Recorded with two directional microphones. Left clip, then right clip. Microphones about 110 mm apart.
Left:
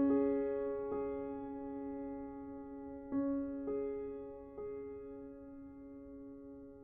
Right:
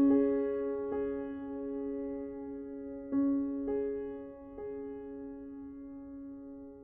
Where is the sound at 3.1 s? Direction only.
20° right (ahead or behind).